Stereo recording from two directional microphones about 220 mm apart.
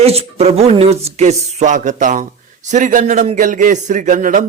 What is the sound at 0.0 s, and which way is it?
A man's voice, 25° right (ahead or behind).